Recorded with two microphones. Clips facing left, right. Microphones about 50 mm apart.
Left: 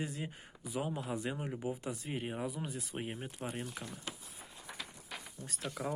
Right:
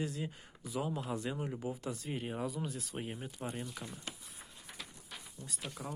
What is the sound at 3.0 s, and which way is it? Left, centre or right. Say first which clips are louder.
Speech: left 1 dB; left.